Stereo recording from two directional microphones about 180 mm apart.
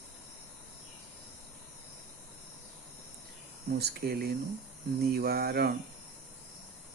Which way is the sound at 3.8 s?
60° right (ahead or behind).